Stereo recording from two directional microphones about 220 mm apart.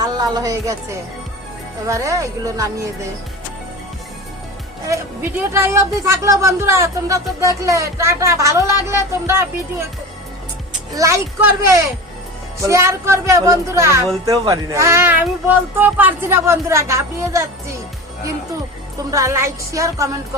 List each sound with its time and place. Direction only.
0.0 s speech: 15° right (ahead or behind)
5.4 s speech: 10° right (ahead or behind)
10.9 s speech: 15° right (ahead or behind)
19.1 s speech: 15° right (ahead or behind)